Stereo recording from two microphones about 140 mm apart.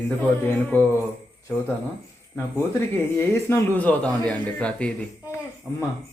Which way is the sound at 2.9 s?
15° left (ahead or behind).